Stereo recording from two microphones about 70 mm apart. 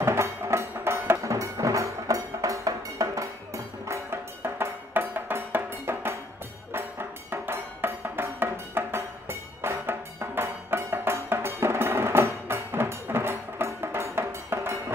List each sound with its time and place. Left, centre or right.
0.0 s music: right
1.3 s music: right